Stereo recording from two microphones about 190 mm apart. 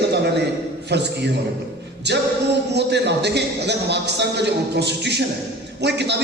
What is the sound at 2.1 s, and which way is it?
A man's voice, 65° right (ahead or behind).